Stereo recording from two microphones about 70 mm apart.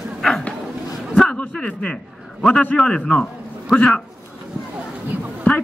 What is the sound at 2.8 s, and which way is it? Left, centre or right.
Speech, centre.